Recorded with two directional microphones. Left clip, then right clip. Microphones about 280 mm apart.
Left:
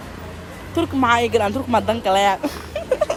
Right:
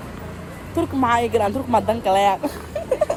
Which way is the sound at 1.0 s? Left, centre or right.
Left.